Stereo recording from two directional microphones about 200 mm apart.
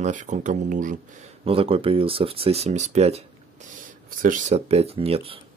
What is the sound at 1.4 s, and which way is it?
Speech, 30° right (ahead or behind).